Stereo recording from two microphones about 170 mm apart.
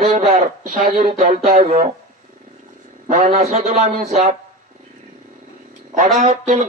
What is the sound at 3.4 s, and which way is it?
Speech, 40° right (ahead or behind).